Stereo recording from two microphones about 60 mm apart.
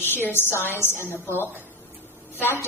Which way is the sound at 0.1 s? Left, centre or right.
Left.